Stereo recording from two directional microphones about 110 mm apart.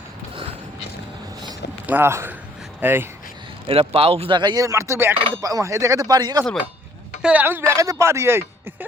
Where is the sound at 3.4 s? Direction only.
50° right (ahead or behind).